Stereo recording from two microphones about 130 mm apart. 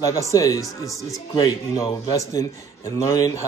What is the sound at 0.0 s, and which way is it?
Speech, 25° left (ahead or behind).